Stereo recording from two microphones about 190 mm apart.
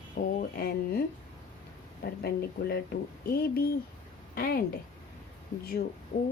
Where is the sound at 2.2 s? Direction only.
55° left (ahead or behind).